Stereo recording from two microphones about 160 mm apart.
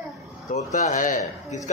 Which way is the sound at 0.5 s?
50° left (ahead or behind).